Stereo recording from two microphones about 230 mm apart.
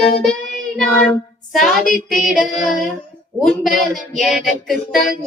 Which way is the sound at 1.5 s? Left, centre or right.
Centre.